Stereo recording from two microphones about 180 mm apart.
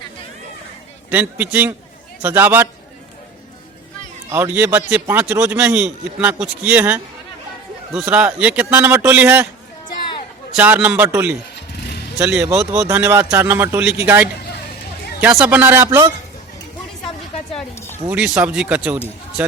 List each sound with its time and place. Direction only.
1.1 s a man's voice: 10° right (ahead or behind)
4.3 s a man's voice: 15° right (ahead or behind)
10.5 s a man's voice: 5° right (ahead or behind)
12.3 s a man's voice: 10° right (ahead or behind)
15.4 s a man's voice: 10° right (ahead or behind)
17.0 s a sound: 30° left (ahead or behind)
18.1 s a man's voice: 5° right (ahead or behind)